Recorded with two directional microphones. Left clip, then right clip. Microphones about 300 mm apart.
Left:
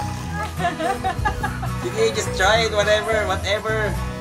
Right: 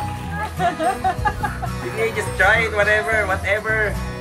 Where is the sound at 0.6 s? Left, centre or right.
Centre.